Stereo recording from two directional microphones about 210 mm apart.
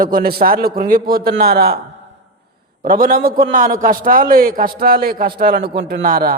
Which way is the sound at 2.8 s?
45° right (ahead or behind).